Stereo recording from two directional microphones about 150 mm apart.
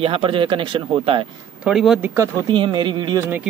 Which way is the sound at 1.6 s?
5° right (ahead or behind).